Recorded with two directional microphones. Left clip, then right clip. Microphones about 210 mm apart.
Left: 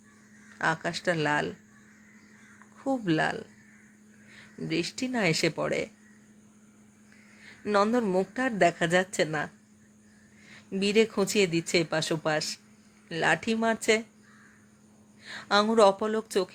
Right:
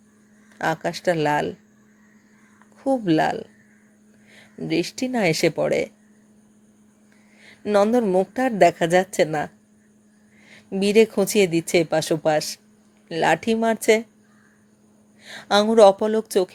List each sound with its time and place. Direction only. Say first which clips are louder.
0.6 s a woman's voice: right 5 dB; 15° right (ahead or behind)
2.7 s a woman's voice: right 8 dB; 15° right (ahead or behind)
7.4 s a woman's voice: right 6 dB; 15° right (ahead or behind)
10.5 s a woman's voice: right 7 dB; 15° right (ahead or behind)
15.2 s a woman's voice: right 6 dB; 15° right (ahead or behind)